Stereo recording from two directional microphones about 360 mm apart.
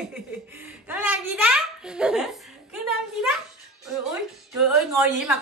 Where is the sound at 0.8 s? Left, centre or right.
Centre.